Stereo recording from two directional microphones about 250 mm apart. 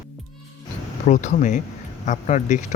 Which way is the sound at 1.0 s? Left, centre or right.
Left.